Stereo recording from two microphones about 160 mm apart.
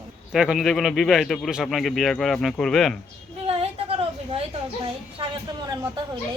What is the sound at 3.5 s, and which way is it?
A woman's voice, 35° right (ahead or behind).